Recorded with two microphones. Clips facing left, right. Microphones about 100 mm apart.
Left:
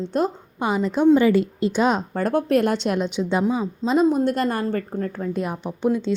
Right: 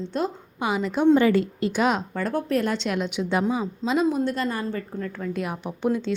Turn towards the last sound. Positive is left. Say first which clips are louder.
# left 3 dB
turn(degrees=20)  # may be behind; listen again after turning